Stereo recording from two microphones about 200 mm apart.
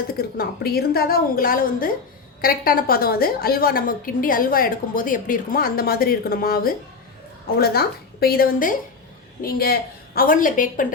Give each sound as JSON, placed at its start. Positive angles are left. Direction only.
{"t": 0.1, "sound": "a woman's voice", "side_deg": 50}